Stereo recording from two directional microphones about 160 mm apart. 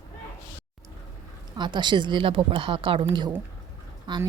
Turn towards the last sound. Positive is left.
turn(degrees=-30)  # may be behind; listen again after turning